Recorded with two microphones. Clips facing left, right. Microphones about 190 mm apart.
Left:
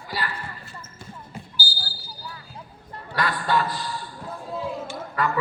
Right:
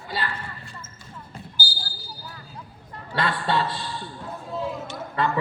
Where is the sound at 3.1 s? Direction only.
25° right (ahead or behind).